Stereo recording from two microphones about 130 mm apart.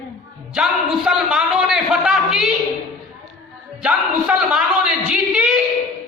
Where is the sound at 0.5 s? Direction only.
5° right (ahead or behind).